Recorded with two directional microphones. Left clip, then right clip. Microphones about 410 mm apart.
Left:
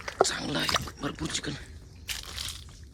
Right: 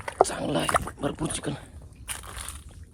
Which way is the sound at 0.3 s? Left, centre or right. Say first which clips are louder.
Right 3 dB; centre.